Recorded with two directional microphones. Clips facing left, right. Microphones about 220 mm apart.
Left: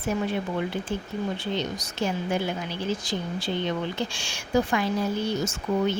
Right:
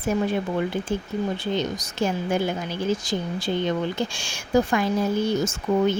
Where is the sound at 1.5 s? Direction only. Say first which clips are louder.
Right 3 dB; 45° right (ahead or behind).